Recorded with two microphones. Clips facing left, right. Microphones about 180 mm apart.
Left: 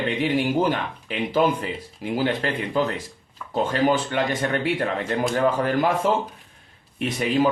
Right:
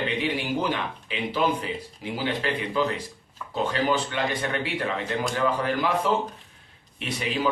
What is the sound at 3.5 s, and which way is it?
Speech, 45° left (ahead or behind).